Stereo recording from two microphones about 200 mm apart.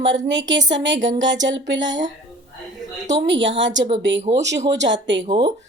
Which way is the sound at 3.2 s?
65° right (ahead or behind).